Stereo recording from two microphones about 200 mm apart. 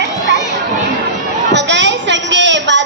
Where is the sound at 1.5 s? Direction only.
60° right (ahead or behind).